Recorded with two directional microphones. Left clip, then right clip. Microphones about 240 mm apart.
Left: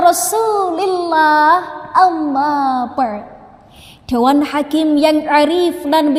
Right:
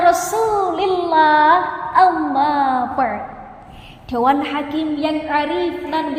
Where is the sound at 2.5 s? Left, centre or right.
Left.